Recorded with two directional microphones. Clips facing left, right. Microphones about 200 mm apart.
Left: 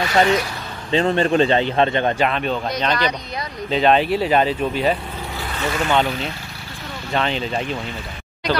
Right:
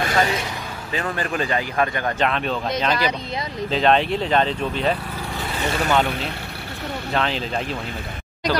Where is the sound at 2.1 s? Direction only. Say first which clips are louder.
Left 2 dB; centre (ahead or behind).